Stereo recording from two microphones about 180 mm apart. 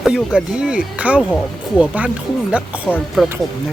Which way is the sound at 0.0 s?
Centre (ahead or behind).